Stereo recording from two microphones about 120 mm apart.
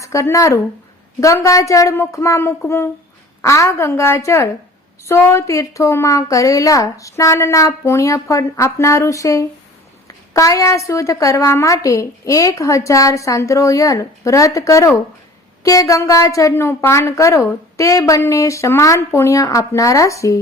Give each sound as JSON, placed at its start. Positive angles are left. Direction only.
{"t": 0.0, "sound": "a woman's voice", "side_deg": 25}